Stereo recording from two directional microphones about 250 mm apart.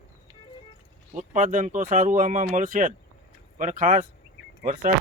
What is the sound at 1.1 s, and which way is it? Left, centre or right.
Speech, right.